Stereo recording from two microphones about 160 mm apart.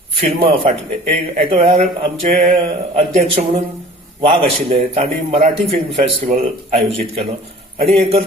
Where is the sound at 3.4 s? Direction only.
55° right (ahead or behind).